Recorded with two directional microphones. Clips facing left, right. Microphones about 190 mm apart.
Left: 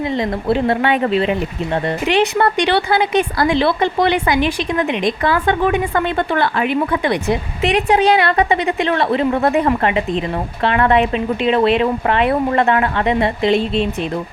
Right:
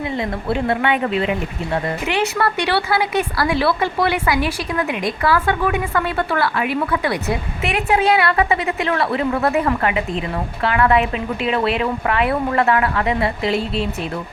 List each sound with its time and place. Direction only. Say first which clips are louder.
0.2 s speech: left 4 dB; 30° left (ahead or behind)